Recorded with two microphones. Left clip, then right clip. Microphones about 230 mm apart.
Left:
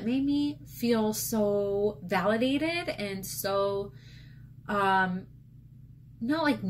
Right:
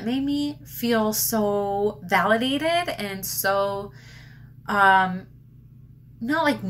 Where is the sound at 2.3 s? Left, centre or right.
Right.